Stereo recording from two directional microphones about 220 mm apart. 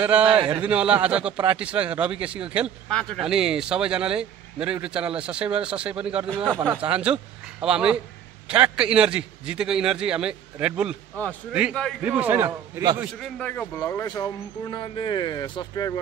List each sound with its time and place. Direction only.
0.0 s a man's voice: 5° right (ahead or behind)
13.4 s speech: 5° left (ahead or behind)